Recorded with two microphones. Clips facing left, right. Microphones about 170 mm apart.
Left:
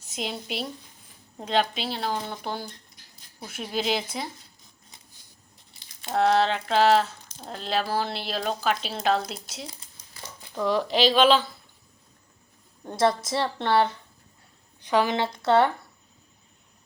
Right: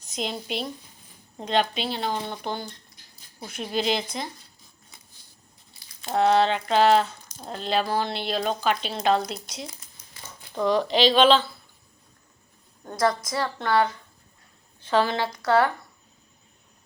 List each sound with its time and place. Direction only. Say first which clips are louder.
0.0 s a woman's voice: right 2 dB; 5° left (ahead or behind)
6.1 s speech: right 1 dB; centre (ahead or behind)
13.3 s a woman's voice: left 1 dB; 25° left (ahead or behind)
14.8 s a woman's voice: even; 15° left (ahead or behind)